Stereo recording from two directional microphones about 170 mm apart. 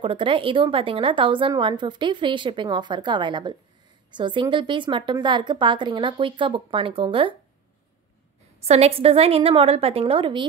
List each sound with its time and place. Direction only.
0.0 s a woman's voice: 30° right (ahead or behind)
8.6 s a woman's voice: 35° right (ahead or behind)